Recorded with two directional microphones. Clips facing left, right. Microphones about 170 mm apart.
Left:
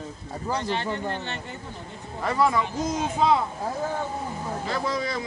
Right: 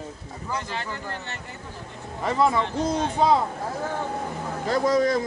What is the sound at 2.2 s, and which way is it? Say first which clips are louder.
Speech: right 1 dB; 20° right (ahead or behind).